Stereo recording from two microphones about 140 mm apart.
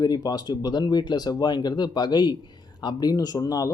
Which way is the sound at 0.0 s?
30° left (ahead or behind).